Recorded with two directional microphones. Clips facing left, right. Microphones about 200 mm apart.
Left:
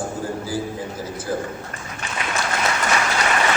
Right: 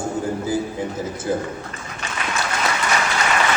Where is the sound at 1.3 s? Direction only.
20° right (ahead or behind).